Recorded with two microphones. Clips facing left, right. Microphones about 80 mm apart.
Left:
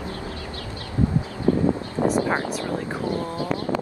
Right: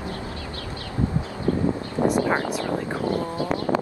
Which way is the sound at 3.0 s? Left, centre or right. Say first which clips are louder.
Right 1 dB; left.